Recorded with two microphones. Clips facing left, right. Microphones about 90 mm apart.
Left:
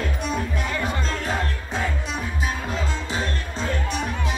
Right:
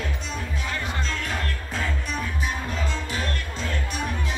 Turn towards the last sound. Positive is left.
turn(degrees=30)  # may be behind; listen again after turning